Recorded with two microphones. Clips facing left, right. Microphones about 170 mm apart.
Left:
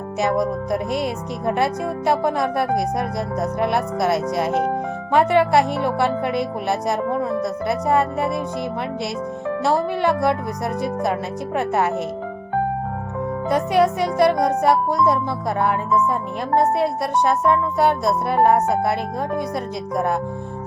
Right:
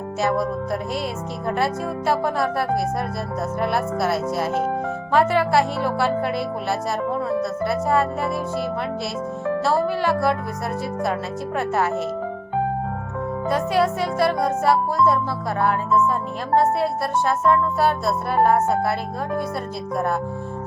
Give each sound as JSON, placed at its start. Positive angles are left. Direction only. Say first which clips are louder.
{"t": 0.2, "sound": "speech", "louder": "left 2 dB", "side_deg": 15}
{"t": 9.6, "sound": "speech", "louder": "left 2 dB", "side_deg": 15}
{"t": 11.5, "sound": "speech", "louder": "left 2 dB", "side_deg": 15}
{"t": 13.5, "sound": "speech", "louder": "left 3 dB", "side_deg": 20}